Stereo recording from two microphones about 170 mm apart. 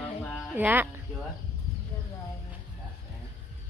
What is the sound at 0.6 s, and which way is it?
Speech, 10° right (ahead or behind).